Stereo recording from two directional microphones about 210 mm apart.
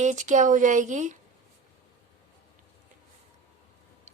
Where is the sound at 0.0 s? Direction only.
35° right (ahead or behind).